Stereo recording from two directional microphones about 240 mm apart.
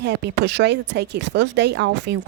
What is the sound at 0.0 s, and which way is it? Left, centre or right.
Speech, right.